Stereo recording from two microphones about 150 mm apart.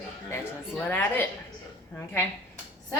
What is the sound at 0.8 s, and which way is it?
Speech, 10° left (ahead or behind).